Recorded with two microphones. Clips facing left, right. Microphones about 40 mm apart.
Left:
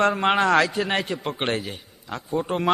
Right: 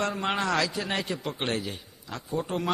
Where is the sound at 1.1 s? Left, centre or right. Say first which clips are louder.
Left 4 dB; left.